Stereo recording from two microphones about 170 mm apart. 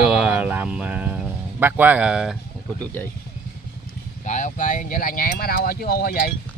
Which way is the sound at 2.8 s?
10° left (ahead or behind).